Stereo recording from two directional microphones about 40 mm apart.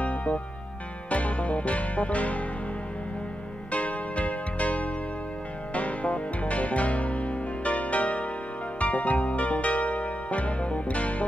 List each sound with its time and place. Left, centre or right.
0.0 s music: left
3.7 s music: left